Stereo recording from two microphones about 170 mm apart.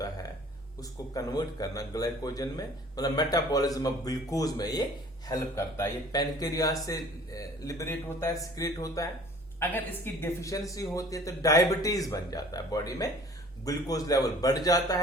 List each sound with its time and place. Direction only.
0.8 s a woman's voice: 20° left (ahead or behind)